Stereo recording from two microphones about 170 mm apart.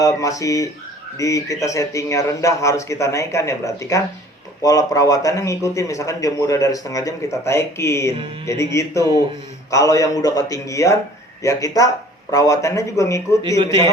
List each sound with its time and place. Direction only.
0.0 s speech: 20° left (ahead or behind)